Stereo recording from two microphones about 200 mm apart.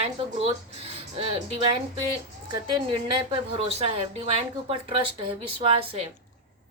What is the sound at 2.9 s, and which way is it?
Speech, 25° right (ahead or behind).